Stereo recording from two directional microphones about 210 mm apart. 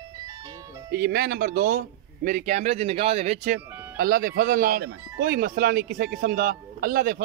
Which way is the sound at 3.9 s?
45° right (ahead or behind).